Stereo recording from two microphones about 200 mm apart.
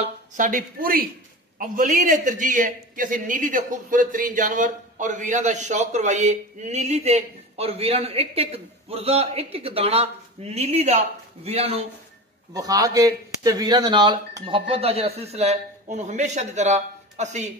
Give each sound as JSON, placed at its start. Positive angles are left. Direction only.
{"t": 0.0, "sound": "a man's voice", "side_deg": -40}
{"t": 12.5, "sound": "speech", "side_deg": -20}